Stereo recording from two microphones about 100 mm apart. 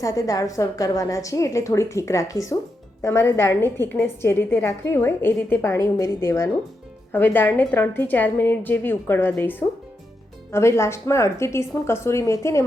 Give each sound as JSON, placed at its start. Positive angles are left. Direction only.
{"t": 0.0, "sound": "a woman's voice", "side_deg": 35}